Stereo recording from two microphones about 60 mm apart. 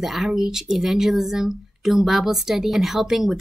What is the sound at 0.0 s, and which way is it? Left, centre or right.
Speech, centre.